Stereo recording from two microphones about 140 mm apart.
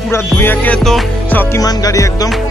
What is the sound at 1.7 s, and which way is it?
Music, 25° left (ahead or behind).